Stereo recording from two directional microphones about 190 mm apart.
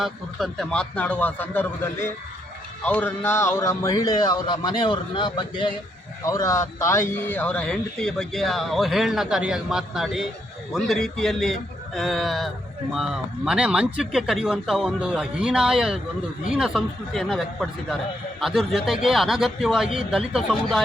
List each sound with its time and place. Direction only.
0.0 s a man's voice: centre (ahead or behind)